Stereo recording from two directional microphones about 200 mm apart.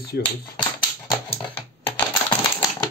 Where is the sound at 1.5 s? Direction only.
10° left (ahead or behind).